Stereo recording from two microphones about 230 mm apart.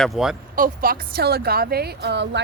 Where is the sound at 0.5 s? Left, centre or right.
Right.